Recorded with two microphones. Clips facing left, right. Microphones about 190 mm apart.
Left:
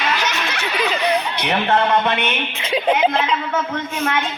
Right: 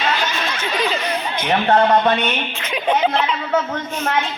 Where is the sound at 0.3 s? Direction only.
75° left (ahead or behind).